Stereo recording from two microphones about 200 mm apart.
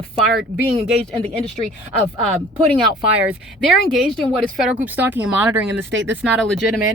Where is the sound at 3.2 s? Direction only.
5° right (ahead or behind).